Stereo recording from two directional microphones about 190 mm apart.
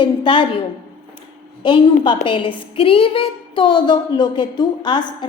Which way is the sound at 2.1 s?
25° left (ahead or behind).